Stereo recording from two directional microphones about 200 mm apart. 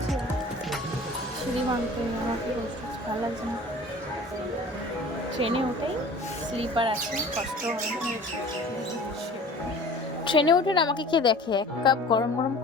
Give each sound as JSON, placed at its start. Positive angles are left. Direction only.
{"t": 5.4, "sound": "speech", "side_deg": -30}
{"t": 10.2, "sound": "speech", "side_deg": 25}